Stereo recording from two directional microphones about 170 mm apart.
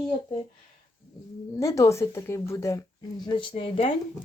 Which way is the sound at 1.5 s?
20° left (ahead or behind).